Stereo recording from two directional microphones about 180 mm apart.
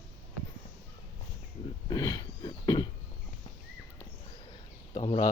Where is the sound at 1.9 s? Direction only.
20° left (ahead or behind).